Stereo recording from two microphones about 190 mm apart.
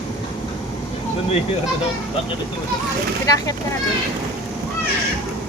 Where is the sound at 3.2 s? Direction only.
20° left (ahead or behind).